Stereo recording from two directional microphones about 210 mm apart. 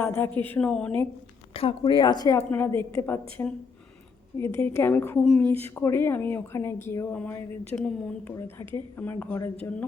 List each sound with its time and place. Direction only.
0.0 s a woman's voice: 10° left (ahead or behind)
1.5 s a woman's voice: 25° left (ahead or behind); by 5.2 s 10° left (ahead or behind)
5.2 s speech: centre (ahead or behind)
5.5 s a woman's voice: 10° left (ahead or behind)